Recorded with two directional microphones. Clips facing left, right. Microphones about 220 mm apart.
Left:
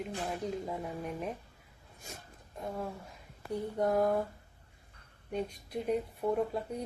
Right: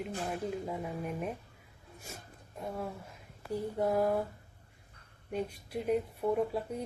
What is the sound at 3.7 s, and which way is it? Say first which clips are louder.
Speech: left 1 dB; 5° right (ahead or behind).